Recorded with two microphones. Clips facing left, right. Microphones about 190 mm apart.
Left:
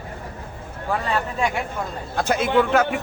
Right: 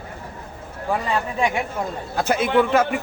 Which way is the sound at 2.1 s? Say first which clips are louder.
Right 1 dB; centre (ahead or behind).